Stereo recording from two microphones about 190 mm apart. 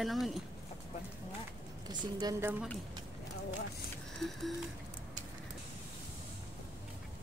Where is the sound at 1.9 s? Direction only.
20° right (ahead or behind).